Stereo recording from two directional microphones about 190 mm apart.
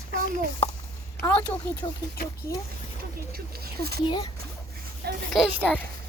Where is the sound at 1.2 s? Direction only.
5° left (ahead or behind).